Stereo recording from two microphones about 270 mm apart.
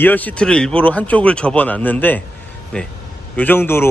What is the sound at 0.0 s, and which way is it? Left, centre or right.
Speech, centre.